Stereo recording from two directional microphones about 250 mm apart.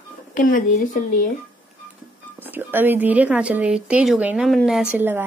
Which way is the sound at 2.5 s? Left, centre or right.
Centre.